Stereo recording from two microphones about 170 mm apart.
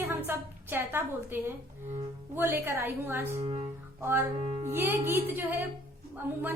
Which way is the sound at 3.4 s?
35° right (ahead or behind).